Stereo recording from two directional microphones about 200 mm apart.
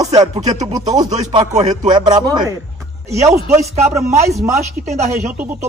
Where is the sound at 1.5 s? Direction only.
35° right (ahead or behind).